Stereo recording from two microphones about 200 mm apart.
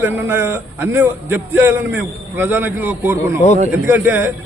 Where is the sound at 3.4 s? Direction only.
35° left (ahead or behind).